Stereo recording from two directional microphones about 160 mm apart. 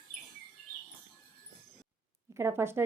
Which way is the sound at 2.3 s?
15° right (ahead or behind).